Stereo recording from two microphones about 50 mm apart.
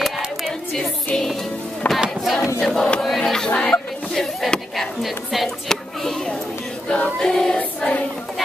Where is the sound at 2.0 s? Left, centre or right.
Centre.